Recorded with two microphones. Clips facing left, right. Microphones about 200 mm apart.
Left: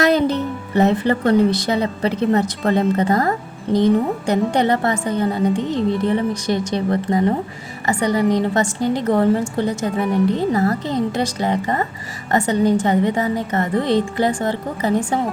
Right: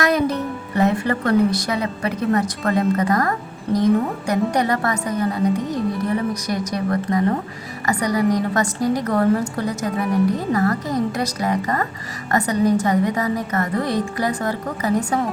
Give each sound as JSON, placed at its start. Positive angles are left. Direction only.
{"t": 0.0, "sound": "music", "side_deg": 25}
{"t": 0.8, "sound": "a woman's voice", "side_deg": 30}